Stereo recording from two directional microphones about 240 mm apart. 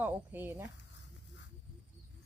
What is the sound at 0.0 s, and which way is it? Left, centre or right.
Speech, centre.